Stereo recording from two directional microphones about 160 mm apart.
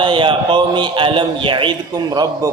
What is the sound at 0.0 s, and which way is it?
A man's voice, 30° right (ahead or behind).